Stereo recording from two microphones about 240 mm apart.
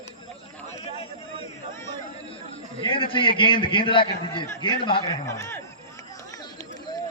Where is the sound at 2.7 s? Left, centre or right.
Left.